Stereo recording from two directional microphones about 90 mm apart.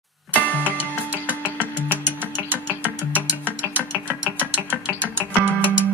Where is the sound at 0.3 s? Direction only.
20° left (ahead or behind).